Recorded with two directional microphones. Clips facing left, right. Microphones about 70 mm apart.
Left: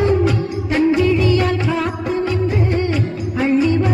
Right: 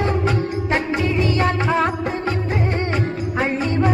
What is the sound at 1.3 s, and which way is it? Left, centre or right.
Music of bollywood, right.